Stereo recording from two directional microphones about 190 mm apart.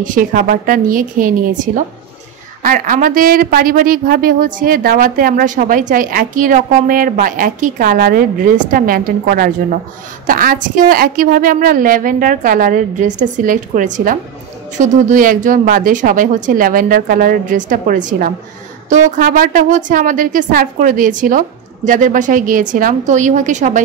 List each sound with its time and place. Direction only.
0.0 s a woman's voice: 45° right (ahead or behind)